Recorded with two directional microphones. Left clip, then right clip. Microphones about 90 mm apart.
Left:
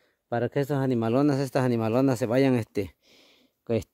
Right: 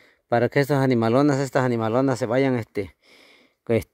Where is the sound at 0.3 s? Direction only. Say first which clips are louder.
Right 7 dB; 50° right (ahead or behind).